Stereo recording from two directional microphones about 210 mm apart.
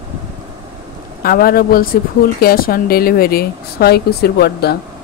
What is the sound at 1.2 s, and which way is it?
Speech, 45° left (ahead or behind).